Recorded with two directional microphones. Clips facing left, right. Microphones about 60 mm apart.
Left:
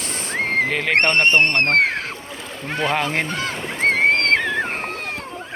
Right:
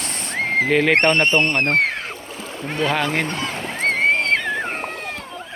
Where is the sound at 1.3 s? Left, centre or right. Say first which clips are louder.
Left 1 dB; left.